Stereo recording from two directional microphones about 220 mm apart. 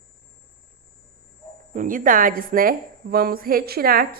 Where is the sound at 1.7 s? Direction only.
35° right (ahead or behind).